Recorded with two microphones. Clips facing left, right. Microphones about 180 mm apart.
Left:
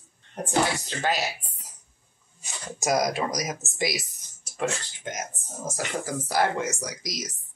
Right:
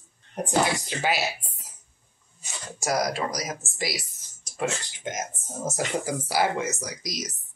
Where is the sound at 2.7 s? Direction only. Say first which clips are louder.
Left 2 dB; 20° left (ahead or behind).